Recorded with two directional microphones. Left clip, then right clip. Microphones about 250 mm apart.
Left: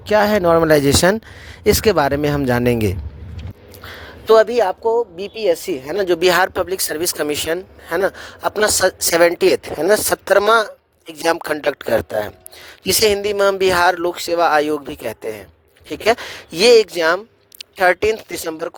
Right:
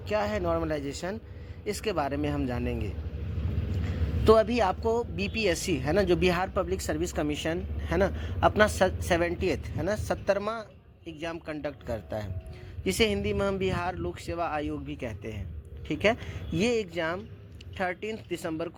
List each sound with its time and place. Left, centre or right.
0.1 s a man's voice: left
4.3 s a man's voice: left